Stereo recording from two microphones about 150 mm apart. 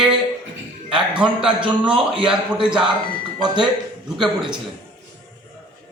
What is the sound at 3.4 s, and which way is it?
Speech, 30° right (ahead or behind).